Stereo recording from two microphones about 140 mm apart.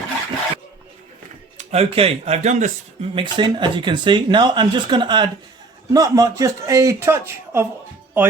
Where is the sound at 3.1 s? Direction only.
35° right (ahead or behind).